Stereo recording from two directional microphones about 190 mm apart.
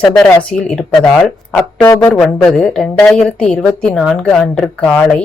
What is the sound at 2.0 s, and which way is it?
A woman's voice, 5° left (ahead or behind).